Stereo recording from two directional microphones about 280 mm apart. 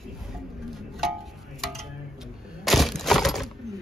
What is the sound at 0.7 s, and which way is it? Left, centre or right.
Music, centre.